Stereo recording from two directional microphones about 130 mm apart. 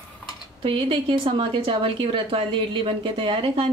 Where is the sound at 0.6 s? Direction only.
45° right (ahead or behind).